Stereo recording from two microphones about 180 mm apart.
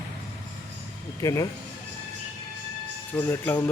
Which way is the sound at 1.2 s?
20° left (ahead or behind).